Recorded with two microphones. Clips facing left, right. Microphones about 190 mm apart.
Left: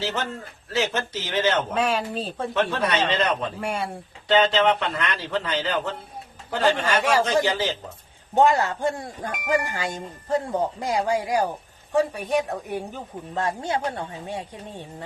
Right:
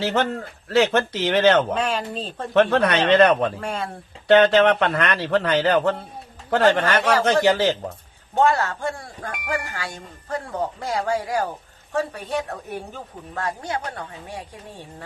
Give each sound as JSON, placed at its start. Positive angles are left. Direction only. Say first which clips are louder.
{"t": 0.0, "sound": "a man's voice", "louder": "right 6 dB", "side_deg": -60}
{"t": 1.7, "sound": "speech", "louder": "even", "side_deg": 5}
{"t": 2.5, "sound": "a man's voice", "louder": "right 7 dB", "side_deg": -65}
{"t": 3.6, "sound": "speech", "louder": "even", "side_deg": 10}
{"t": 4.3, "sound": "a man's voice", "louder": "right 5 dB", "side_deg": -55}
{"t": 8.4, "sound": "speech", "louder": "left 1 dB", "side_deg": 15}